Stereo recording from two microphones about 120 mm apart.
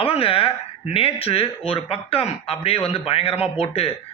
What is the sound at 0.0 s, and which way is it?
Speech, 50° left (ahead or behind).